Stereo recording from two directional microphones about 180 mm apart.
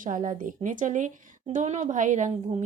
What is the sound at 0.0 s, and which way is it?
A woman's voice, 50° right (ahead or behind).